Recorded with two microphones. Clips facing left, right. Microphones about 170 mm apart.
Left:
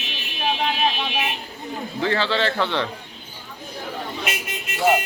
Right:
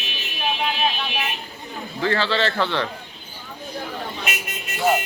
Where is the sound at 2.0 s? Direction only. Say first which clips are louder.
Even; 15° left (ahead or behind).